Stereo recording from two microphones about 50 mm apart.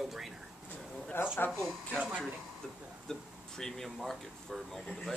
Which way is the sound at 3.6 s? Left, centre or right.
Centre.